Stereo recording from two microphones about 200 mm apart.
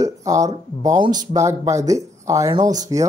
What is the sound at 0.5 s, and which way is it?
Speech, 20° right (ahead or behind).